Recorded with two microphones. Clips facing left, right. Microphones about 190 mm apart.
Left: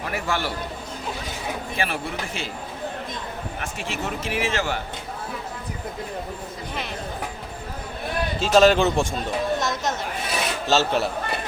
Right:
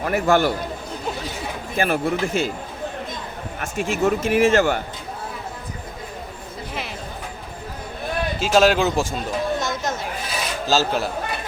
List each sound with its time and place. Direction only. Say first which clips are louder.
0.0 s speech: right 9 dB; 45° right (ahead or behind)
1.7 s speech: right 9 dB; 45° right (ahead or behind)
3.6 s speech: right 11 dB; 45° right (ahead or behind)
8.4 s speech: left 1 dB; centre (ahead or behind)
9.6 s chatter: even; centre (ahead or behind)
10.7 s speech: even; centre (ahead or behind)